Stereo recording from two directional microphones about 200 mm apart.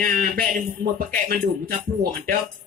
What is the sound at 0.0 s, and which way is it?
Speech, 45° right (ahead or behind).